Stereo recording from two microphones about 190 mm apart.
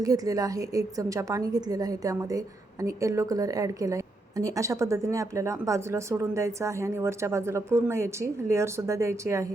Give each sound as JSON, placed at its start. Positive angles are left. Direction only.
{"t": 0.0, "sound": "a woman's voice", "side_deg": -20}